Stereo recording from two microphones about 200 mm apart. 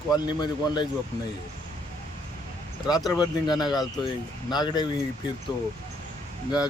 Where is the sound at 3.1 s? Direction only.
20° left (ahead or behind).